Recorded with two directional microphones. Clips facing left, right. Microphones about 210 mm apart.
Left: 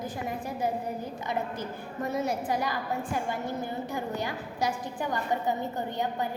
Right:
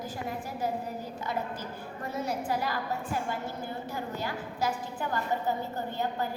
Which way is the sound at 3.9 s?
15° left (ahead or behind).